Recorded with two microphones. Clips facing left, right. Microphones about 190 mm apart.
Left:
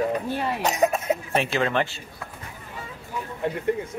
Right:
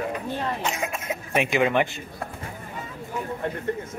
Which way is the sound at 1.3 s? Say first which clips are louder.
Right 5 dB; 15° right (ahead or behind).